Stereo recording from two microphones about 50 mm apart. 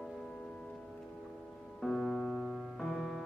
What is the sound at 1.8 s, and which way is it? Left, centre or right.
Music, centre.